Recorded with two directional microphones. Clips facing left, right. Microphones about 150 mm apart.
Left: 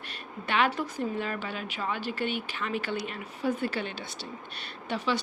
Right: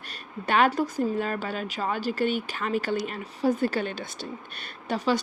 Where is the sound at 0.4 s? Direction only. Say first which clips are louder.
Right 5 dB; 45° right (ahead or behind).